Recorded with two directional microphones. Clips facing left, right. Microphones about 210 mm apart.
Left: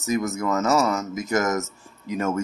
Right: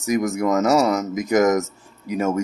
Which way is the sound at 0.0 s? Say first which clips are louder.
Right 4 dB; 15° right (ahead or behind).